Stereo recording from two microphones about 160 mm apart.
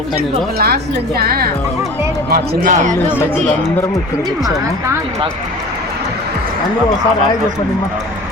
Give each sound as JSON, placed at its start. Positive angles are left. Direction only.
{"t": 0.2, "sound": "speech", "side_deg": -75}
{"t": 2.3, "sound": "speech", "side_deg": -55}